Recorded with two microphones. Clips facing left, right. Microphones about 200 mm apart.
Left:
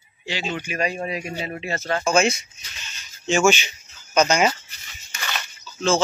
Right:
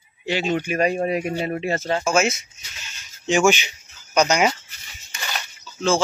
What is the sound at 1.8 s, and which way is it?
Speech, 25° right (ahead or behind).